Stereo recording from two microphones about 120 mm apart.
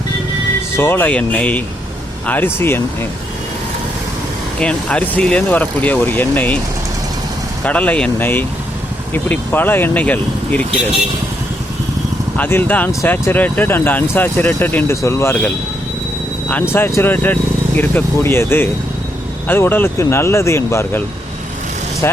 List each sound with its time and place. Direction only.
0.8 s speech: 15° left (ahead or behind)
4.6 s speech: 10° left (ahead or behind)
7.6 s speech: 10° left (ahead or behind)
12.4 s speech: 15° left (ahead or behind)
22.0 s speech: 20° left (ahead or behind)